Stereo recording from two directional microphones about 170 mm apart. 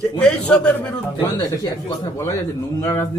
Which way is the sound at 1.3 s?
25° left (ahead or behind).